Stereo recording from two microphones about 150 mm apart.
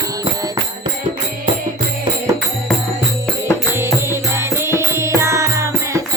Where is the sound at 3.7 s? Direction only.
15° right (ahead or behind).